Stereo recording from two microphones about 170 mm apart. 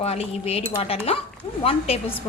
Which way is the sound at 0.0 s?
35° left (ahead or behind).